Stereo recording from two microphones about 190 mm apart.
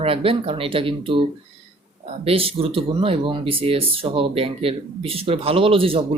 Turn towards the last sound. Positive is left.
turn(degrees=-30)  # may be behind; listen again after turning